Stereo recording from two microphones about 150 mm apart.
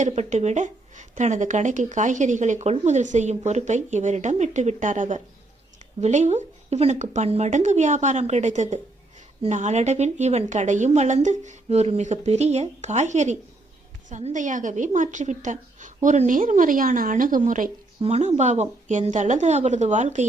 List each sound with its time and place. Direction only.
0.0 s a woman's voice: 50° right (ahead or behind)